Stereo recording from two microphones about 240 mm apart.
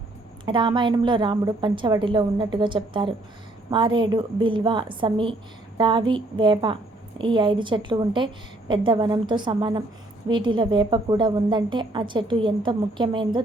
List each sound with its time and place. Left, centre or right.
0.4 s a woman's voice: centre